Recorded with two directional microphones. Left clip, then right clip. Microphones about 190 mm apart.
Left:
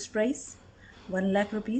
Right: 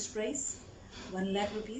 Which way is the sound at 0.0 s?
60° left (ahead or behind).